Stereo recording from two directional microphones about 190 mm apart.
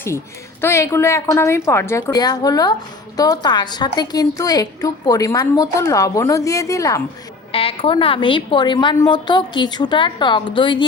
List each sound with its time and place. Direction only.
0.6 s a woman's voice: 15° left (ahead or behind)
7.5 s a woman's voice: 30° left (ahead or behind)